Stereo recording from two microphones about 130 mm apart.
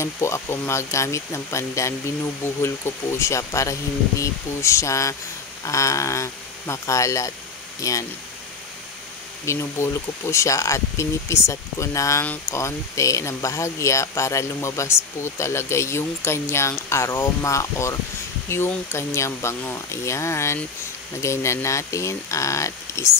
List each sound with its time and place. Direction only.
0.0 s speech: 20° left (ahead or behind)
9.5 s speech: 20° left (ahead or behind)